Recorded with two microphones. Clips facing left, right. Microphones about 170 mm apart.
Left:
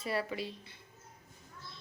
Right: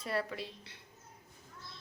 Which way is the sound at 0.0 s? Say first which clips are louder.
Left 1 dB; 5° left (ahead or behind).